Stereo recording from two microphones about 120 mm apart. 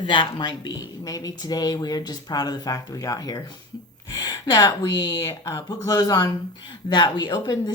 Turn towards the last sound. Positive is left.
turn(degrees=35)  # may be behind; listen again after turning